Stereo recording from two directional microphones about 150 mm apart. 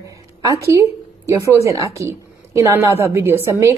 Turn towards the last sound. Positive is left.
turn(degrees=-15)  # may be behind; listen again after turning